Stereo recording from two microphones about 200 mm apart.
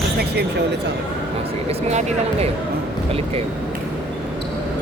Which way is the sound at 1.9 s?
35° right (ahead or behind).